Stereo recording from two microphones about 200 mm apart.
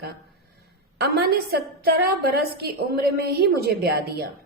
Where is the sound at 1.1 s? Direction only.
50° right (ahead or behind).